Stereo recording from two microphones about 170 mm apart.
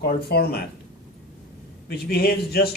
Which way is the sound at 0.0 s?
65° left (ahead or behind).